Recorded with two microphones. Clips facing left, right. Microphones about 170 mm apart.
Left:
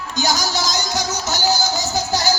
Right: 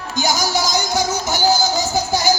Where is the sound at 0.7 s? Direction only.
15° right (ahead or behind).